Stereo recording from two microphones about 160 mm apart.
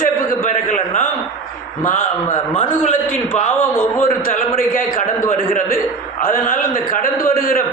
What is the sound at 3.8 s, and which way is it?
Speech, 10° left (ahead or behind).